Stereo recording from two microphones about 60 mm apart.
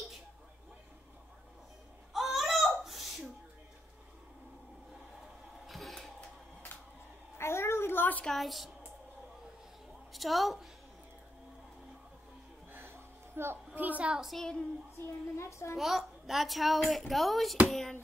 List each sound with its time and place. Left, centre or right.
2.1 s a sound: centre
5.7 s a sound: centre
7.3 s a sound: left
8.3 s speech: centre
10.1 s a woman's voice: centre
12.7 s music: right
13.7 s a child's voice: right
14.2 s speech: centre
15.3 s a child's voice: left
15.8 s speech: centre